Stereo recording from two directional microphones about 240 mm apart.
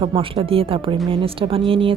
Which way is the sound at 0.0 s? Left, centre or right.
Right.